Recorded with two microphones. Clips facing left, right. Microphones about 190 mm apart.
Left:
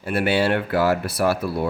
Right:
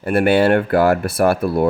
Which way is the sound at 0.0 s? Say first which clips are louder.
Right 6 dB; 55° right (ahead or behind).